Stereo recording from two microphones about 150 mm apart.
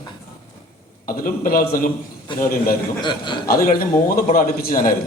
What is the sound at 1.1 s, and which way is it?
A man's voice, 70° left (ahead or behind).